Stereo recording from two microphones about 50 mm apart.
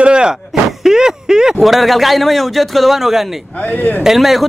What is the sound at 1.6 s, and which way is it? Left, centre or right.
A man's voice, centre.